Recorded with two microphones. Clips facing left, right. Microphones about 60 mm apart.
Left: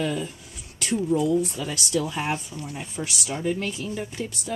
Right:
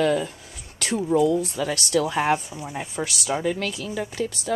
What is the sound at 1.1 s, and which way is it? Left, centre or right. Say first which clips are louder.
Speech: right 3 dB; right.